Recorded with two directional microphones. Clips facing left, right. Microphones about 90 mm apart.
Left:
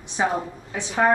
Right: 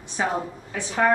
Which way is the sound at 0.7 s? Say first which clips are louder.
Left 1 dB; 15° left (ahead or behind).